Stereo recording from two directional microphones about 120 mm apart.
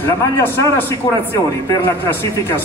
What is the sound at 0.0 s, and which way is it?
A man's voice, 20° left (ahead or behind).